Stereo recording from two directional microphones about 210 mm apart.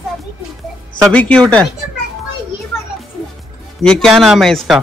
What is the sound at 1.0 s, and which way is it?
Speech, 5° left (ahead or behind).